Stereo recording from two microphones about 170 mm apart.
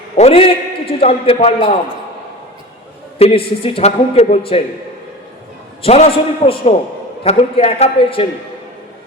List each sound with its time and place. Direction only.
0.2 s a man's voice: 40° left (ahead or behind)
3.2 s a man's voice: 35° left (ahead or behind)
5.8 s a man's voice: 35° left (ahead or behind)